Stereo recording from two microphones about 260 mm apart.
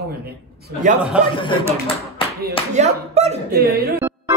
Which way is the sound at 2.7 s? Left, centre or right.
Right.